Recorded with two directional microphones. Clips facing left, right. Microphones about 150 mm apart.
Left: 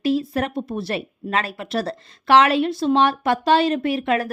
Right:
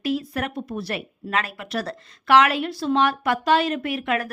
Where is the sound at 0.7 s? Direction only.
25° left (ahead or behind).